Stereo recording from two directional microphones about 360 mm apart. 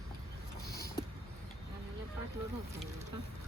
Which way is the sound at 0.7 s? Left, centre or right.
Left.